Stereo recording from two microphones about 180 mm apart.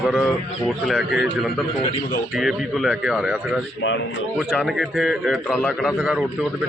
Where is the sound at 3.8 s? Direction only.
90° left.